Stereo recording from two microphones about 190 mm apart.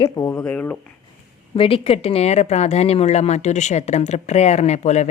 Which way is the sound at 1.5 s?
30° left (ahead or behind).